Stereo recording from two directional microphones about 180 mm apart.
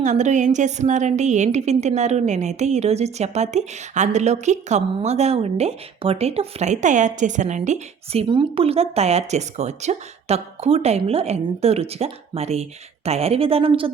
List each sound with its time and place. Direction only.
0.0 s a woman's voice: 40° right (ahead or behind)